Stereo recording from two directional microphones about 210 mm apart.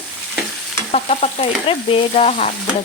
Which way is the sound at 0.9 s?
35° left (ahead or behind).